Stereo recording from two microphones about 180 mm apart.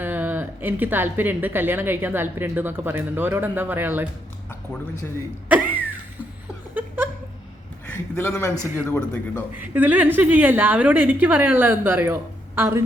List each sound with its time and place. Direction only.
0.0 s speech: 10° right (ahead or behind)
6.7 s a sound: 10° right (ahead or behind)
7.9 s a man's voice: 10° left (ahead or behind)
9.6 s speech: 10° right (ahead or behind)